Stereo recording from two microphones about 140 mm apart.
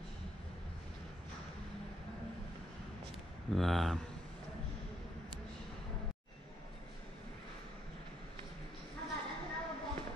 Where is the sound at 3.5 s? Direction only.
Centre (ahead or behind).